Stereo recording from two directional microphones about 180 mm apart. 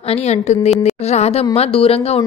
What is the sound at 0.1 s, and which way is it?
A woman's voice, 35° left (ahead or behind).